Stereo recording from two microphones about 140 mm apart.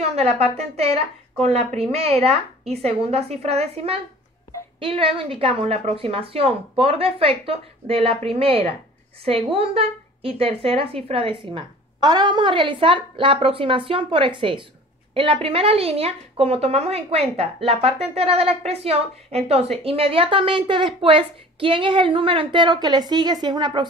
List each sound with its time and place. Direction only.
0.0 s a woman's voice: 45° right (ahead or behind)
12.0 s a woman's voice: 30° right (ahead or behind)